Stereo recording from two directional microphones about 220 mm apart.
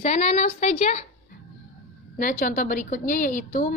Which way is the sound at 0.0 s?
30° left (ahead or behind).